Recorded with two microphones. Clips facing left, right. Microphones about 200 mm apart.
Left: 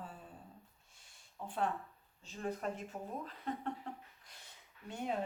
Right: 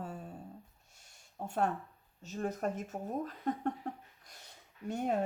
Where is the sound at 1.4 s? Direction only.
45° right (ahead or behind).